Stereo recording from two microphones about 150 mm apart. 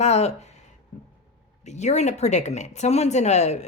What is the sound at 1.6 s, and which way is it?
Speech, 50° left (ahead or behind).